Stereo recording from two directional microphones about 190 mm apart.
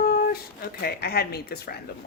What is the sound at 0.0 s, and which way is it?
Speech, 50° left (ahead or behind).